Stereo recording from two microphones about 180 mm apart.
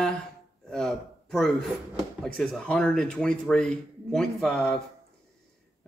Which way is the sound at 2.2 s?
Centre (ahead or behind).